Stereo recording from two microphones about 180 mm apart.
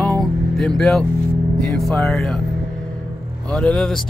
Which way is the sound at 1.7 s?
Centre (ahead or behind).